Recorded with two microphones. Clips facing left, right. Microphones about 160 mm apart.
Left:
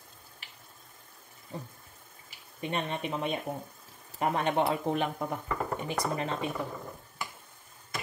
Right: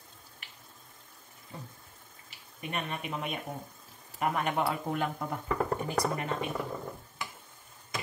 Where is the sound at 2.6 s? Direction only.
25° left (ahead or behind).